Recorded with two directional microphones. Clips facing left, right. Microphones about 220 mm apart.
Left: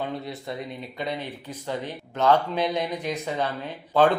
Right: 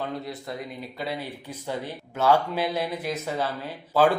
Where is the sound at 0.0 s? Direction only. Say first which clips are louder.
Left 1 dB; centre (ahead or behind).